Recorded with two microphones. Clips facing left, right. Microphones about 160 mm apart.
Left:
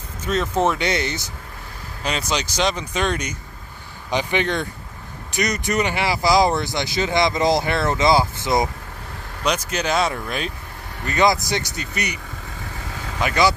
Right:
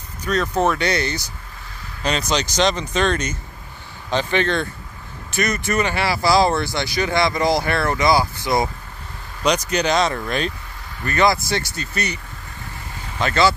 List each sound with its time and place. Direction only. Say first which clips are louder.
0.2 s speech: right 1 dB; 25° left (ahead or behind)
2.0 s speech: right 3 dB; 5° left (ahead or behind)
9.4 s speech: right 4 dB; 5° left (ahead or behind)
11.1 s speech: even; 20° left (ahead or behind)
13.2 s speech: right 1 dB; 15° left (ahead or behind)